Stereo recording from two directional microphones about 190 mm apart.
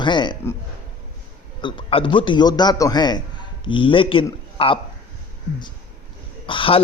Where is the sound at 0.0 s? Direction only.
25° left (ahead or behind).